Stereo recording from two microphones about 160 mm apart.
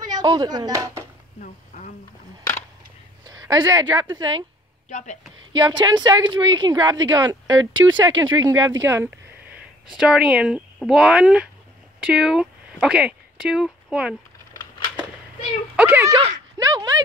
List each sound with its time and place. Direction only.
0.0 s speech: 25° right (ahead or behind)
1.4 s speech: 60° left (ahead or behind)
3.3 s a woman's voice: 25° right (ahead or behind)
4.8 s speech: 50° left (ahead or behind)
5.5 s a woman's voice: 25° right (ahead or behind)
9.8 s a woman's voice: 5° right (ahead or behind)
15.7 s speech: 10° right (ahead or behind)
16.5 s a sound: 25° right (ahead or behind)